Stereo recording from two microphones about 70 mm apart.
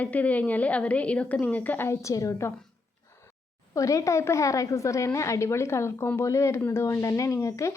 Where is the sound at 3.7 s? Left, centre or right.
Left.